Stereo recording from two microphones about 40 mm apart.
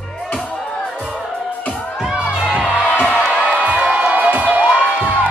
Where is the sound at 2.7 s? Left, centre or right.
Right.